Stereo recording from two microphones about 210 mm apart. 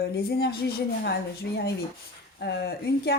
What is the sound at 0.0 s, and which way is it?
Speech, 50° left (ahead or behind).